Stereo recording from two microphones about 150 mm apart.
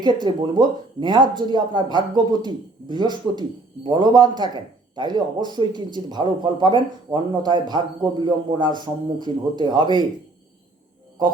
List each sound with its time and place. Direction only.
0.0 s a man's voice: 30° right (ahead or behind)